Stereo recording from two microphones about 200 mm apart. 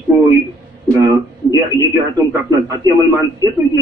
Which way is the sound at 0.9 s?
15° right (ahead or behind).